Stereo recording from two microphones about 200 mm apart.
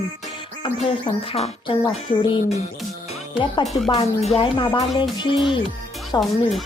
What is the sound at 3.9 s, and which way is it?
Speech, 30° left (ahead or behind).